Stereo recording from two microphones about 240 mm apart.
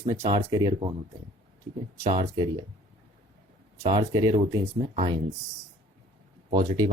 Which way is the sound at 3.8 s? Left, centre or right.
Right.